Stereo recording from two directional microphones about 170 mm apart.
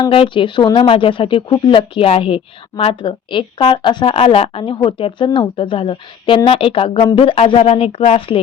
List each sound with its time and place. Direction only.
0.0 s speech: 30° left (ahead or behind)